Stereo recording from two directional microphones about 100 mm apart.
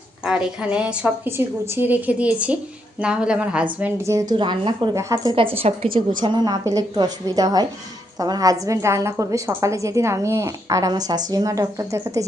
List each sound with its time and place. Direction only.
0.3 s a woman's voice: 10° right (ahead or behind)
3.9 s a woman's voice: 30° right (ahead or behind)
4.4 s a woman's voice: 55° right (ahead or behind)
4.9 s a woman's voice: 35° right (ahead or behind)
5.3 s a woman's voice: 65° right (ahead or behind); by 12.2 s 30° right (ahead or behind)